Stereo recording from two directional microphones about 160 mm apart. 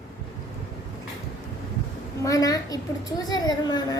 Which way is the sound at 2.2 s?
20° left (ahead or behind).